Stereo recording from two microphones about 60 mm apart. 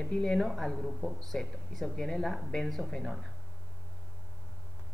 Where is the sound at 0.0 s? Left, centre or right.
Centre.